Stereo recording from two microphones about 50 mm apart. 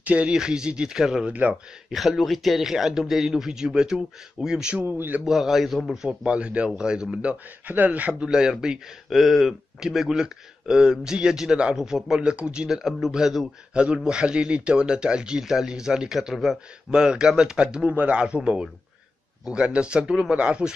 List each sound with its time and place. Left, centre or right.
0.0 s speech: right
0.4 s speech: centre
1.2 s speech: right
1.9 s speech: centre
4.9 s speech: right
5.2 s a man's voice: centre
6.0 s a man's voice: right
7.6 s speech: right
8.2 s speech: centre
9.1 s speech: centre; by 12.6 s right
12.6 s speech: centre
13.7 s speech: centre
16.9 s a man's voice: centre